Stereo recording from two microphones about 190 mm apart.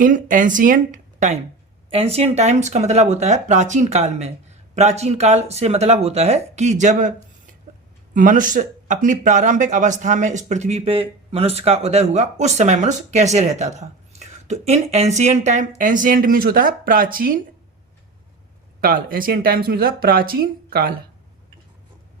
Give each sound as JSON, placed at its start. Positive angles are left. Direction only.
{"t": 0.0, "sound": "speech", "side_deg": -45}
{"t": 8.1, "sound": "speech", "side_deg": -45}
{"t": 18.8, "sound": "speech", "side_deg": -50}